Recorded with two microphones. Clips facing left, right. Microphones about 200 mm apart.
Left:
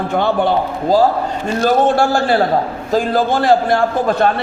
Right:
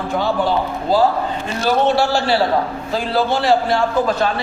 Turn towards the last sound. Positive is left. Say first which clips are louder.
# left 2 dB
turn(degrees=55)  # may be behind; listen again after turning